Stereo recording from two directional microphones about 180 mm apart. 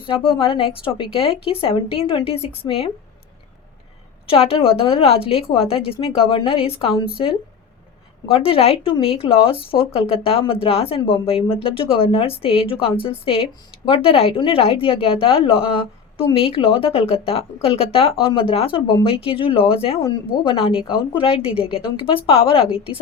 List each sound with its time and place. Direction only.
0.0 s a woman's voice: 30° left (ahead or behind)
4.3 s speech: 30° left (ahead or behind)
8.3 s speech: 30° left (ahead or behind)